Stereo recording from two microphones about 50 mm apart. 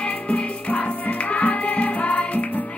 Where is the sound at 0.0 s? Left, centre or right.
Left.